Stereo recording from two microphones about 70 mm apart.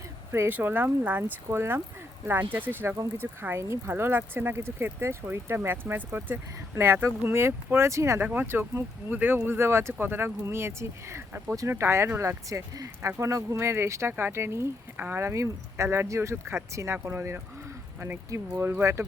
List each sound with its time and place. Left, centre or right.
0.3 s speech: right
8.2 s speech: right
13.0 s speech: right
14.9 s speech: right
15.2 s speech: right
18.5 s speech: right